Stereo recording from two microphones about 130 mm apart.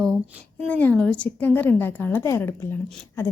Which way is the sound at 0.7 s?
10° left (ahead or behind).